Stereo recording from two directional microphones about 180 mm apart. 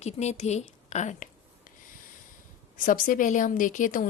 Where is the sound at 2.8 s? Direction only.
50° left (ahead or behind).